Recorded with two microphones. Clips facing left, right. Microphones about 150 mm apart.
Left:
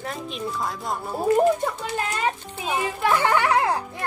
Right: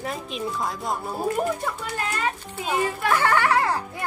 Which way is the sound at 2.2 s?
20° left (ahead or behind).